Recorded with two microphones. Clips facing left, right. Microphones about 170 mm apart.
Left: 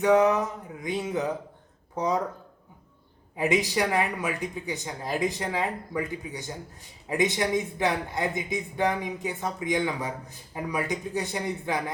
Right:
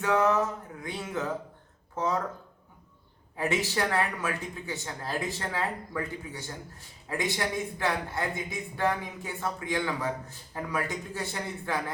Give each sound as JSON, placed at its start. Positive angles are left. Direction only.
{"t": 0.0, "sound": "speech", "side_deg": 15}
{"t": 3.3, "sound": "speech", "side_deg": 15}